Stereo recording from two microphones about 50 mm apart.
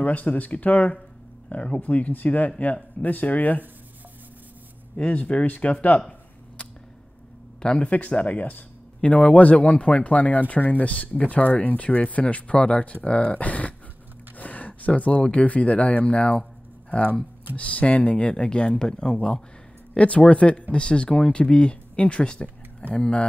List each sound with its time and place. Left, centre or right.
0.0 s speech: left
4.9 s speech: left
7.6 s speech: centre
7.9 s speech: left